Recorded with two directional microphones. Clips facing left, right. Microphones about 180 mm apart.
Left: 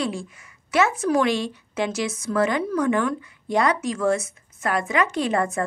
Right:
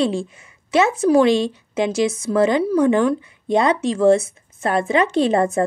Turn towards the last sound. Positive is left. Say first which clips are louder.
# right 6 dB
turn(degrees=-30)  # may be behind; listen again after turning